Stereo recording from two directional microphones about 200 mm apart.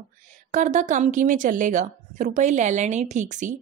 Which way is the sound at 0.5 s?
40° right (ahead or behind).